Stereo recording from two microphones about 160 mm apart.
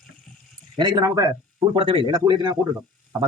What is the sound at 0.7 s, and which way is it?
Speech, 25° right (ahead or behind).